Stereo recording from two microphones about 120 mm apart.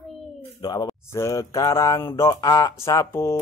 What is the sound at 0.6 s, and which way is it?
Speech, 35° left (ahead or behind).